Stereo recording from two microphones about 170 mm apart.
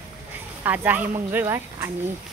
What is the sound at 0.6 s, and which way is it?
Speech, 10° right (ahead or behind).